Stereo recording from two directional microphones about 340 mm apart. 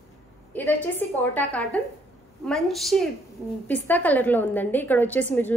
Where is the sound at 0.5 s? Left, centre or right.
Centre.